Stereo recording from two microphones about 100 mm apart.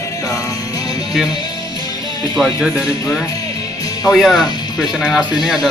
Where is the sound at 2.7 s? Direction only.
30° left (ahead or behind).